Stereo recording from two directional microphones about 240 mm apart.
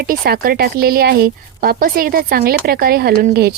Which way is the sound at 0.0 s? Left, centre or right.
Right.